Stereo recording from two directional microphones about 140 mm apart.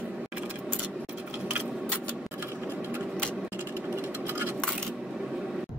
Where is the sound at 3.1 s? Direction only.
5° left (ahead or behind).